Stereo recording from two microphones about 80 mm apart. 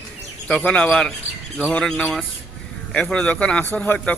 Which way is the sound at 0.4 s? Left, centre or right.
Centre.